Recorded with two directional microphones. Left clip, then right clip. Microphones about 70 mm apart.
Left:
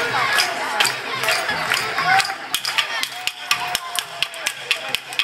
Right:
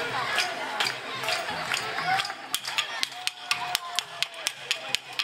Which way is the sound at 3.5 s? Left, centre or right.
Centre.